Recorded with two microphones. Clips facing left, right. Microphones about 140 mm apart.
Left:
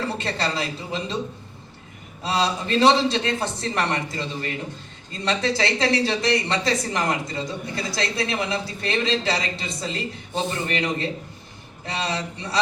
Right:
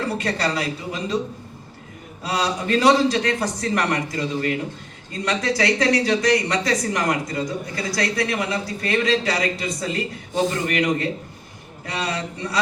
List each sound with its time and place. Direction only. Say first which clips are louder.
0.2 s speech: right 2 dB; 25° left (ahead or behind)
2.2 s speech: even; 25° left (ahead or behind)